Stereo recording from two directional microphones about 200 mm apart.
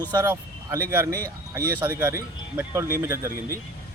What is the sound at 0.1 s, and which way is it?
Speech, 15° right (ahead or behind).